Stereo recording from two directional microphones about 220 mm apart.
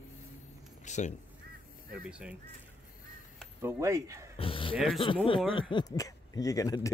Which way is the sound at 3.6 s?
15° right (ahead or behind).